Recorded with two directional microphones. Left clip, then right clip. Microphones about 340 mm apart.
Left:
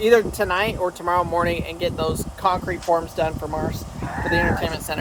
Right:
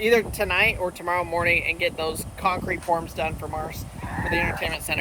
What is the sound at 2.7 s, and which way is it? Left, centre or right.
Speech, left.